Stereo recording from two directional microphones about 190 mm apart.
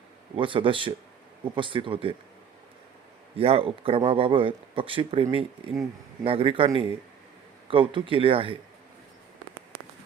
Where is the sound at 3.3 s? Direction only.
30° right (ahead or behind).